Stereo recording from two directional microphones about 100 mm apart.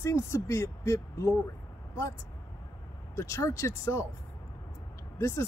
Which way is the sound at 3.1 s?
30° left (ahead or behind).